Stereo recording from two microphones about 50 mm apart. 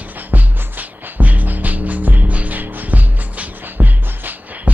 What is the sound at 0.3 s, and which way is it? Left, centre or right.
Music, right.